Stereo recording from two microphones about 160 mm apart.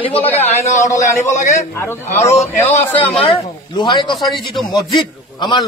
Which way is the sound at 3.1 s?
35° left (ahead or behind).